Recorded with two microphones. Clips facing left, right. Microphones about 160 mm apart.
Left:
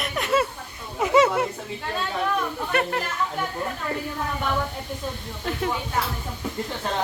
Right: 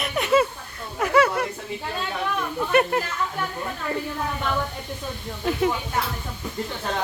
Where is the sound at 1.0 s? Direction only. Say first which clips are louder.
Left 1 dB; 20° left (ahead or behind).